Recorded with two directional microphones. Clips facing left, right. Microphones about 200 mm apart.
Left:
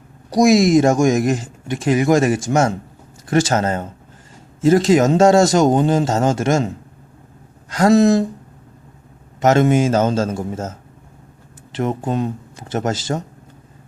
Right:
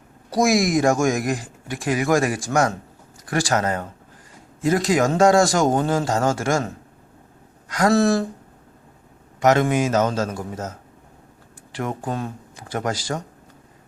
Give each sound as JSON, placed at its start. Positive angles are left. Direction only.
{"t": 0.3, "sound": "speech", "side_deg": 20}
{"t": 9.4, "sound": "speech", "side_deg": 25}